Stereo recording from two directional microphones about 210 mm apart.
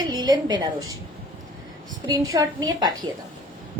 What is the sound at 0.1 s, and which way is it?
Speech, 20° right (ahead or behind).